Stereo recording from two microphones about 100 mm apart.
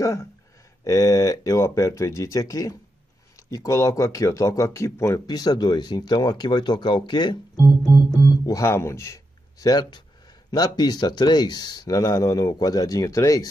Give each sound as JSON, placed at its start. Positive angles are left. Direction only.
{"t": 0.0, "sound": "speech", "side_deg": 30}
{"t": 5.2, "sound": "speech", "side_deg": 40}
{"t": 8.2, "sound": "speech", "side_deg": 30}